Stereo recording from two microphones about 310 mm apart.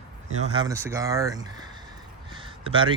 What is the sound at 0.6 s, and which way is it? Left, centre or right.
Speech, centre.